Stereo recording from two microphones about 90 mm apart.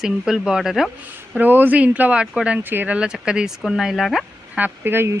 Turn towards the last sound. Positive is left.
turn(degrees=-25)  # may be behind; listen again after turning